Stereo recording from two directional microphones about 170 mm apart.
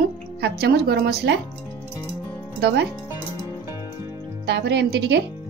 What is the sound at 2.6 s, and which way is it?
Speech, 80° right.